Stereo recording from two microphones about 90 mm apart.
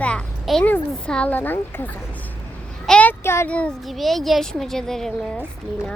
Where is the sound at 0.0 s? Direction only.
10° left (ahead or behind).